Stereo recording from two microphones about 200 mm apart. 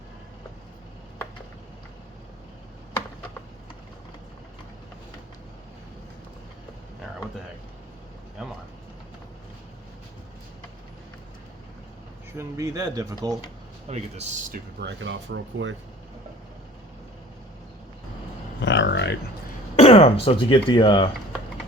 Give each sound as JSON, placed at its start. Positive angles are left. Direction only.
{"t": 12.4, "sound": "speech", "side_deg": -15}
{"t": 13.8, "sound": "speech", "side_deg": -35}
{"t": 14.8, "sound": "speech", "side_deg": -65}
{"t": 18.6, "sound": "music", "side_deg": 65}
{"t": 19.7, "sound": "speech", "side_deg": 30}